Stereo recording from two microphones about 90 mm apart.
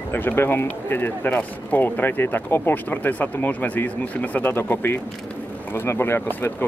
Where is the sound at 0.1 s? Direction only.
25° left (ahead or behind).